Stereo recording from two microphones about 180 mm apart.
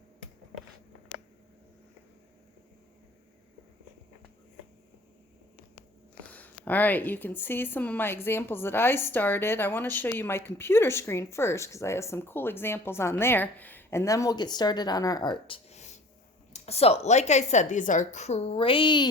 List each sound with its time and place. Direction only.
6.2 s a woman's voice: 10° left (ahead or behind); by 19.0 s 25° left (ahead or behind)